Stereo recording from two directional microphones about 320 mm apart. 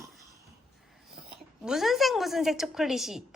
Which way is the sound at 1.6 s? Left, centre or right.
Centre.